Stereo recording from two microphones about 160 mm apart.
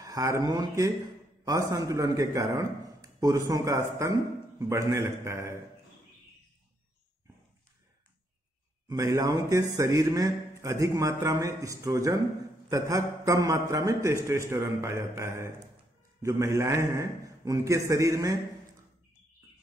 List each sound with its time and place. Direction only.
0.0 s a man's voice: 20° right (ahead or behind)
8.8 s a man's voice: 20° right (ahead or behind)